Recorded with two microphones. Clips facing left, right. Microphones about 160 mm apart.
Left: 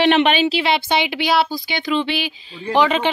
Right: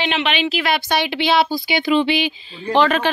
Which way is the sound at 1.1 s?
5° left (ahead or behind).